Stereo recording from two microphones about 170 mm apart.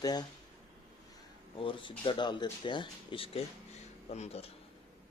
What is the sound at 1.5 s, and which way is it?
Speech, 30° left (ahead or behind).